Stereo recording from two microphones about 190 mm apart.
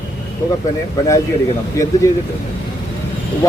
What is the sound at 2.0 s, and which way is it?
Speech, 15° left (ahead or behind).